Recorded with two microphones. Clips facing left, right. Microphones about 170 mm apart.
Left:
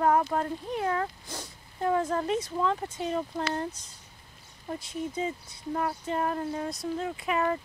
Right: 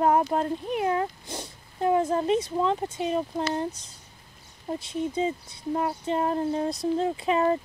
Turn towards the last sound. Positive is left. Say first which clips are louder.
# right 5 dB
turn(degrees=-25)  # may be behind; listen again after turning